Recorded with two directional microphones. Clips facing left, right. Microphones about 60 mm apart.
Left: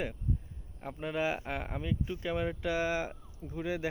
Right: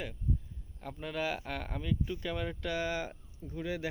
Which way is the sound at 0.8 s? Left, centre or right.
Left.